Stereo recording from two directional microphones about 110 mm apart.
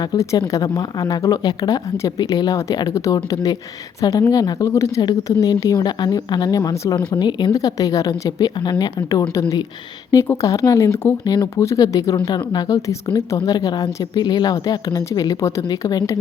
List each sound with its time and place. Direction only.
0.0 s speech: 35° left (ahead or behind)
7.1 s speech: 40° left (ahead or behind)